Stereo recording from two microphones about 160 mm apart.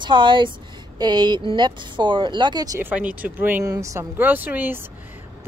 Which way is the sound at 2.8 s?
10° right (ahead or behind).